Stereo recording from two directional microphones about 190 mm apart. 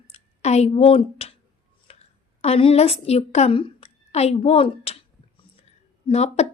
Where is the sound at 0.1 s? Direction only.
35° left (ahead or behind).